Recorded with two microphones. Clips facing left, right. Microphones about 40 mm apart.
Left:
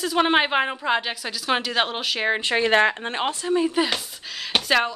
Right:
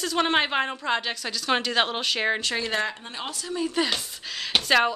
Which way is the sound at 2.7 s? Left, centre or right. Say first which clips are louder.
Left 9 dB; left.